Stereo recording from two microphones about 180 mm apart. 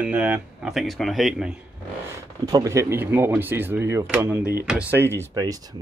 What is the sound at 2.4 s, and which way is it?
Speech, 20° right (ahead or behind).